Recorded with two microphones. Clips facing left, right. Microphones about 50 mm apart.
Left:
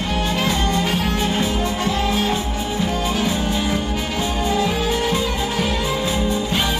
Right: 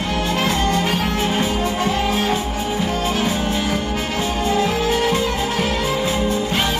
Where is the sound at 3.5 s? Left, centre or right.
Centre.